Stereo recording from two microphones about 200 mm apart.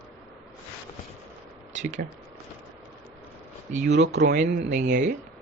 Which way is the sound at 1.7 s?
35° right (ahead or behind).